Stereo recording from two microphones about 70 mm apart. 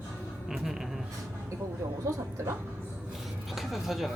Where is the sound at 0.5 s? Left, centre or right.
Centre.